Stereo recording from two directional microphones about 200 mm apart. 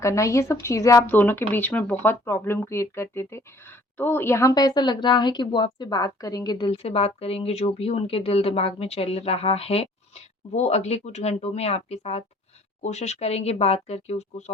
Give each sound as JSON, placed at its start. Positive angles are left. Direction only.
{"t": 0.0, "sound": "speech", "side_deg": 15}